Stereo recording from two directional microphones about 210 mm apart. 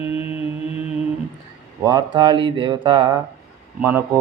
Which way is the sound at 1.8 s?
20° right (ahead or behind).